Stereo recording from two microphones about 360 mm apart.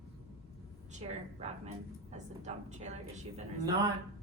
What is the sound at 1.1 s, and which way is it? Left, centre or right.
A woman's voice, centre.